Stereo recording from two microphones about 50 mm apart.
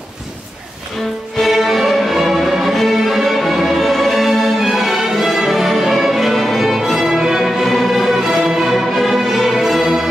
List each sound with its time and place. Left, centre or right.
1.4 s music: centre